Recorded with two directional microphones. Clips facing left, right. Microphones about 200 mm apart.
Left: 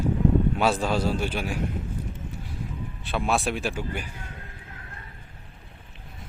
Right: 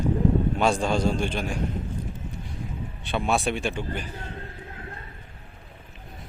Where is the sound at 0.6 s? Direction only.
5° left (ahead or behind).